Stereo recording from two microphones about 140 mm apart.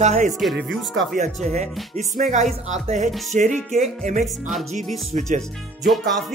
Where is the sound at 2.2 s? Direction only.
55° right (ahead or behind).